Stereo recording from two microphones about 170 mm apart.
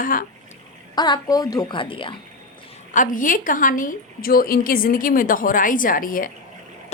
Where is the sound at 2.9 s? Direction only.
50° left (ahead or behind).